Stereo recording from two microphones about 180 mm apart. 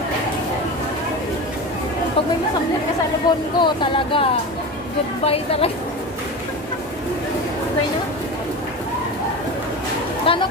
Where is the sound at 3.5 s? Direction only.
30° left (ahead or behind).